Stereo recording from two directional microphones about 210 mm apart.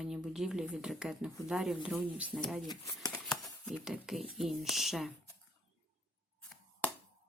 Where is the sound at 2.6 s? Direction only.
20° left (ahead or behind).